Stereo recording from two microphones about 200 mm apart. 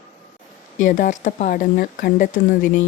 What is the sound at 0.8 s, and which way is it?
Speech, 40° left (ahead or behind).